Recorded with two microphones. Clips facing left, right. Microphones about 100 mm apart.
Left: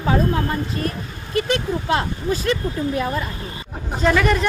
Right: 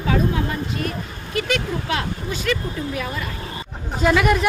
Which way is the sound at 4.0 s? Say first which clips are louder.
Even; 5° right (ahead or behind).